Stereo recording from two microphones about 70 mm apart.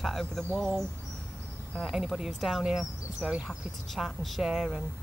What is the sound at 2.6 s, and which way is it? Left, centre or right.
Speech, centre.